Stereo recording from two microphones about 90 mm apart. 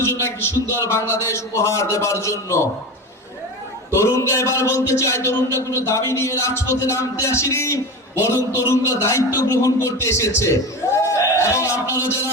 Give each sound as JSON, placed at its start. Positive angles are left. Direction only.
{"t": 0.0, "sound": "a man's voice", "side_deg": 30}
{"t": 4.0, "sound": "a man's voice", "side_deg": 35}
{"t": 11.0, "sound": "music", "side_deg": 35}